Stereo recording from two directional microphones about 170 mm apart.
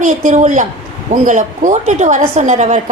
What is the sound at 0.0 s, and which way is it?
A woman's voice, 50° right (ahead or behind).